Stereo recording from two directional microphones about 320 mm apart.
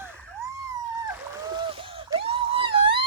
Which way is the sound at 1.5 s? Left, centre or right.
Centre.